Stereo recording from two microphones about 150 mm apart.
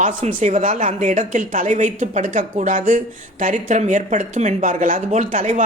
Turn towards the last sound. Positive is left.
turn(degrees=-55)  # may be behind; listen again after turning